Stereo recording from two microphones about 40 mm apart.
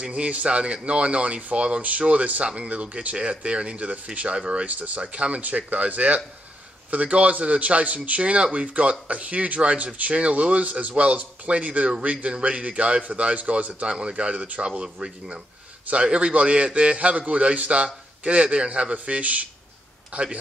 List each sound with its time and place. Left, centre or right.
0.0 s a man's voice: right
2.5 s speech: right
4.6 s a man's voice: right
13.8 s speech: right
14.6 s speech: right
15.9 s a man's voice: right